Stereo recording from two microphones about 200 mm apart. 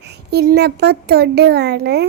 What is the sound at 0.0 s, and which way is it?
A child's voice, 55° right (ahead or behind).